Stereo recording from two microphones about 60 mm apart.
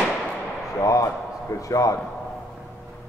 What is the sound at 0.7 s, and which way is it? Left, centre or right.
A man's voice, left.